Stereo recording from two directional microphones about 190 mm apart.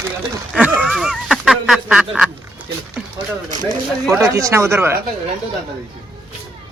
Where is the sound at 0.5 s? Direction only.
5° right (ahead or behind).